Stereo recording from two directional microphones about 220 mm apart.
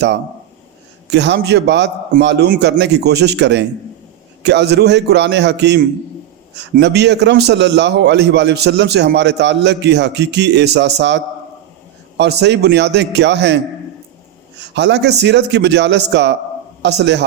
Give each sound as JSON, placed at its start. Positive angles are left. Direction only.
{"t": 1.1, "sound": "a man's voice", "side_deg": -50}
{"t": 14.7, "sound": "a man's voice", "side_deg": -50}